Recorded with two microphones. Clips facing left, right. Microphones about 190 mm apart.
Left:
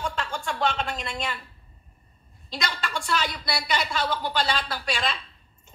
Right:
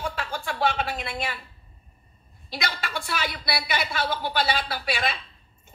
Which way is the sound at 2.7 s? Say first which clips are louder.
Left 1 dB; 55° right (ahead or behind).